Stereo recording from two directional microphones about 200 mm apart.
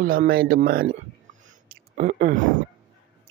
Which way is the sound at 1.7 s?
40° right (ahead or behind).